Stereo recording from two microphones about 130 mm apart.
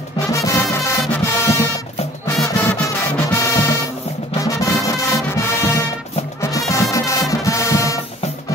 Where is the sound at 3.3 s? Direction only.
20° left (ahead or behind).